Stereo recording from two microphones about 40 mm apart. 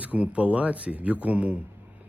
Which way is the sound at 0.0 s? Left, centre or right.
Right.